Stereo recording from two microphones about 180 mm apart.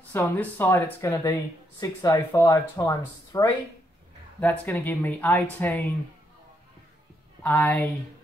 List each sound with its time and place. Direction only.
0.1 s speech: 10° left (ahead or behind)
7.4 s speech: 5° left (ahead or behind)